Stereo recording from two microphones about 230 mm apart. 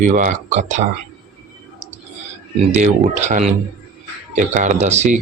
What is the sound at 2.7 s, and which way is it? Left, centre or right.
Speech, right.